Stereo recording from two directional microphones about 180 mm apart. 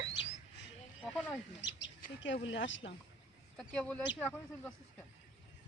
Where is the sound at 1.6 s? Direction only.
80° left.